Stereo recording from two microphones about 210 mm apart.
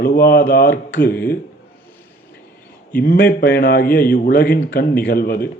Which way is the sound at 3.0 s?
45° left (ahead or behind).